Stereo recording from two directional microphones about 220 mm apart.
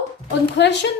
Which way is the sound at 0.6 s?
50° left (ahead or behind).